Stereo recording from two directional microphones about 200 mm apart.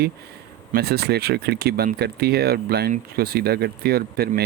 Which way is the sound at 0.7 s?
50° right (ahead or behind).